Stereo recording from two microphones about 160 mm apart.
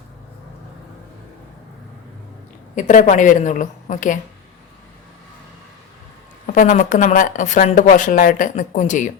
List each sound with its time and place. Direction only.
2.7 s a woman's voice: 55° left (ahead or behind)
6.5 s a woman's voice: 55° left (ahead or behind)